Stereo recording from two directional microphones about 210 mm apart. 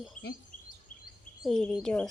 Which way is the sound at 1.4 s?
Centre (ahead or behind).